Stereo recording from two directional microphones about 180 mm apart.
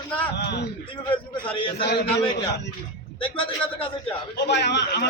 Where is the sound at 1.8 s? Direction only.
65° left (ahead or behind).